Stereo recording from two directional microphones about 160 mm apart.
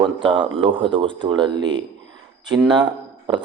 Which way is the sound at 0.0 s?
30° right (ahead or behind).